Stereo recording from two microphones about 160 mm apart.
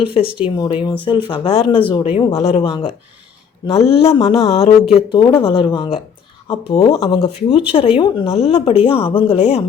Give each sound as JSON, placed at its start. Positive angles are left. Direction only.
{"t": 0.0, "sound": "speech", "side_deg": 35}